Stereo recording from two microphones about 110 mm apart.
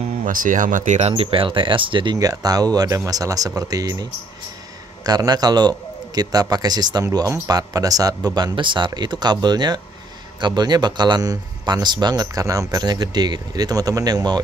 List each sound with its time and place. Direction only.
0.8 s speech: 80° right; by 2.1 s 50° right (ahead or behind)
2.1 s speech: 35° right (ahead or behind)